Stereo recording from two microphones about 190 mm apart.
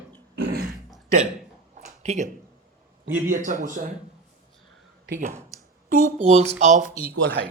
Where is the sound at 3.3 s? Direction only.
40° right (ahead or behind).